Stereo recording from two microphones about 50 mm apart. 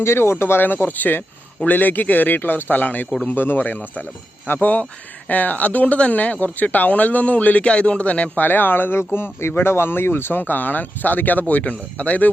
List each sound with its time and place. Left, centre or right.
0.0 s speech: left
8.4 s speech: left